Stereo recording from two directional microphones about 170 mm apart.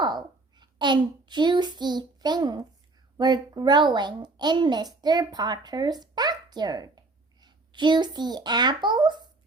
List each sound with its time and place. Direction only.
0.0 s a child's voice: 25° right (ahead or behind)